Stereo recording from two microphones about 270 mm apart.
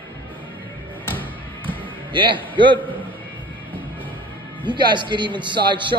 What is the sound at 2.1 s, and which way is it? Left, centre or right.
Speech, centre.